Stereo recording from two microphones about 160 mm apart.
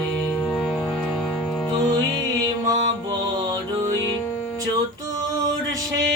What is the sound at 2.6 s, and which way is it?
Music, 25° right (ahead or behind).